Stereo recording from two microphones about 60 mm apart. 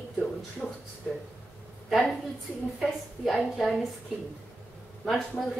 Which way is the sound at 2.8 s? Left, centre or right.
Centre.